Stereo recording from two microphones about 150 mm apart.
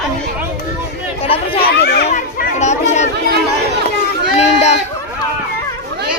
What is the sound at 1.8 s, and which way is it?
Speech, 90° left.